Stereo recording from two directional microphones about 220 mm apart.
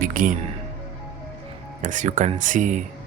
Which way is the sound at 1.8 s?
35° right (ahead or behind).